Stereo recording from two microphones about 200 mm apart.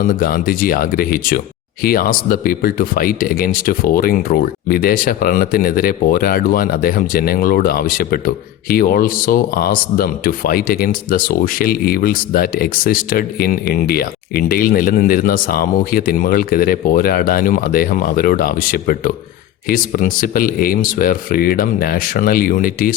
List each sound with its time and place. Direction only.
0.1 s speech: 45° left (ahead or behind)